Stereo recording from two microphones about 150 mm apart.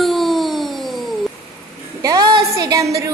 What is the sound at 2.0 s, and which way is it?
A woman's voice, 25° right (ahead or behind).